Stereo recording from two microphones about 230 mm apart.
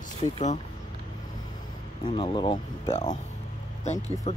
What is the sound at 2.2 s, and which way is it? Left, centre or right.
Speech, left.